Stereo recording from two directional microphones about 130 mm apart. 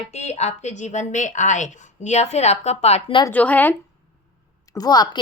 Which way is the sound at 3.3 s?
15° left (ahead or behind).